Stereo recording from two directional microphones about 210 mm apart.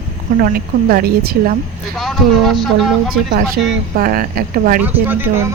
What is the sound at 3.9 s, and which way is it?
Speech, 45° right (ahead or behind).